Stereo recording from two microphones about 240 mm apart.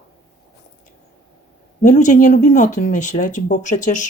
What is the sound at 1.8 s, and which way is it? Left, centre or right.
Speech, left.